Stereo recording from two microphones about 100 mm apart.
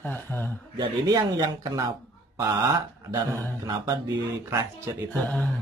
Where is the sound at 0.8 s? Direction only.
40° right (ahead or behind).